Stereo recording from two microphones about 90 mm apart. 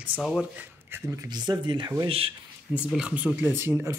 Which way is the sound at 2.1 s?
90° right.